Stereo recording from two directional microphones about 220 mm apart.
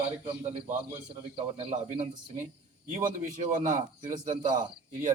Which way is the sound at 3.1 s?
35° right (ahead or behind).